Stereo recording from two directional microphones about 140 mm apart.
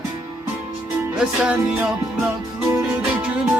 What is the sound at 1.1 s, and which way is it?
Music, 5° right (ahead or behind).